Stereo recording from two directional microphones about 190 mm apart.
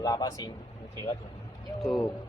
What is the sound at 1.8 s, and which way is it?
Speech, centre (ahead or behind).